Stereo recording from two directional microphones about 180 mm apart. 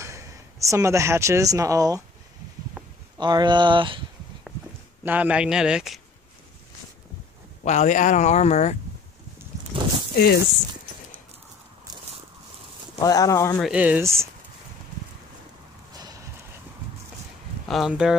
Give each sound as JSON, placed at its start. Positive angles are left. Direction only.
{"t": 0.0, "sound": "speech", "side_deg": -15}
{"t": 2.8, "sound": "a sound", "side_deg": -5}
{"t": 3.2, "sound": "speech", "side_deg": -25}
{"t": 5.0, "sound": "speech", "side_deg": -10}
{"t": 7.6, "sound": "speech", "side_deg": 40}
{"t": 9.7, "sound": "a sound", "side_deg": -30}
{"t": 10.1, "sound": "speech", "side_deg": 55}
{"t": 13.0, "sound": "speech", "side_deg": 20}
{"t": 13.6, "sound": "speech", "side_deg": -5}
{"t": 17.6, "sound": "speech", "side_deg": 0}